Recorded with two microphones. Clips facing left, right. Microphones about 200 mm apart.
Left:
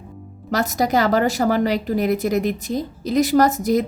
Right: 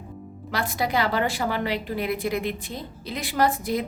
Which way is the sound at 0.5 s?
40° left (ahead or behind).